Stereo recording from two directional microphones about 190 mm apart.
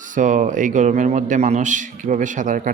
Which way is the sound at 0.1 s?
40° right (ahead or behind).